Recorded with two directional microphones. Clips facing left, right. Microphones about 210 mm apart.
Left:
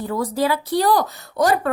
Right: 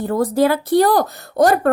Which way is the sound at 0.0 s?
55° right (ahead or behind).